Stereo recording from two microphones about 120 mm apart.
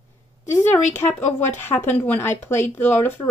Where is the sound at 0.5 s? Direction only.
20° left (ahead or behind).